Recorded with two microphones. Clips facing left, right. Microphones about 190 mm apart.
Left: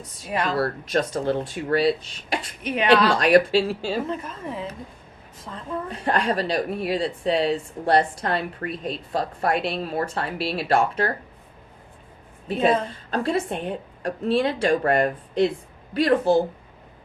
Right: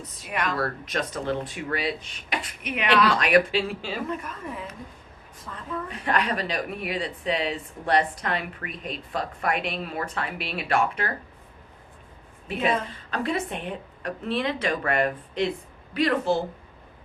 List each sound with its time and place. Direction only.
0.3 s a woman's voice: 30° left (ahead or behind)
12.5 s a woman's voice: 30° left (ahead or behind)